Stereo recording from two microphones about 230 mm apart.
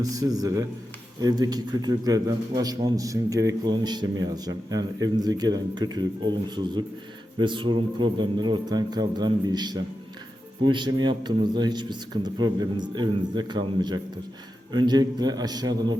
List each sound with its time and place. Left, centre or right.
0.0 s a man's voice: centre
7.3 s a man's voice: right